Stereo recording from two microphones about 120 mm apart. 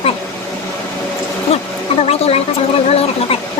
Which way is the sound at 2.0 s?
55° left (ahead or behind).